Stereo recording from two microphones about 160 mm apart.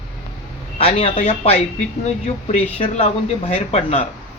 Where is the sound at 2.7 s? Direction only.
40° left (ahead or behind).